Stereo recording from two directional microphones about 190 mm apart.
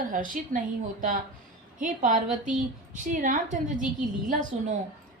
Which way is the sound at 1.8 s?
40° right (ahead or behind).